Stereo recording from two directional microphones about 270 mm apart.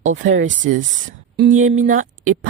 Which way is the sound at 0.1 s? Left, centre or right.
Right.